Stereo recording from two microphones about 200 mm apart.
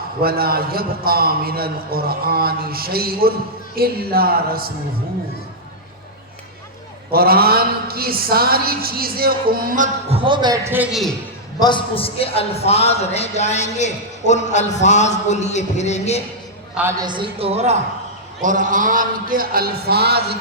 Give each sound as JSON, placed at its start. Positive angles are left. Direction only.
{"t": 0.2, "sound": "a man's voice", "side_deg": -50}
{"t": 7.1, "sound": "a man's voice", "side_deg": -50}
{"t": 10.2, "sound": "a man's voice", "side_deg": -25}
{"t": 11.6, "sound": "a man's voice", "side_deg": 25}
{"t": 17.0, "sound": "a man's voice", "side_deg": -25}